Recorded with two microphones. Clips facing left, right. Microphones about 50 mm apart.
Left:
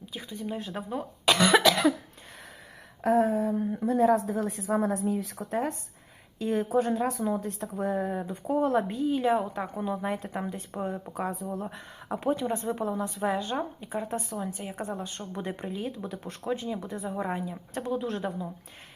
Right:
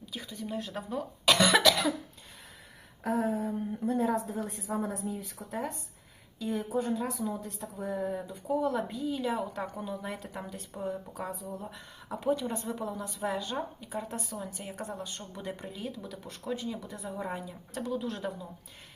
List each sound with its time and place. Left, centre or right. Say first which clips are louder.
0.0 s speech: left 3 dB; centre
3.0 s a woman's voice: left 6 dB; left
9.5 s a woman's voice: left 5 dB; left
14.4 s speech: left 5 dB; centre
14.8 s a woman's voice: left 4 dB; left